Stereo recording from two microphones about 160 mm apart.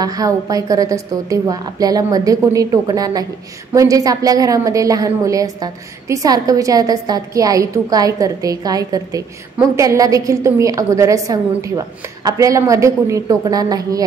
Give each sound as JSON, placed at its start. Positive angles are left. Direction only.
{"t": 0.0, "sound": "a woman's voice", "side_deg": -25}